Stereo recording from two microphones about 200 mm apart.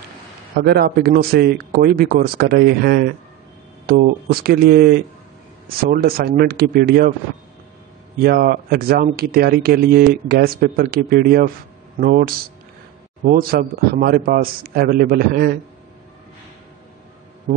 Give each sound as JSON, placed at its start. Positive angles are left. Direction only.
{"t": 0.6, "sound": "speech", "side_deg": -50}
{"t": 8.2, "sound": "speech", "side_deg": -50}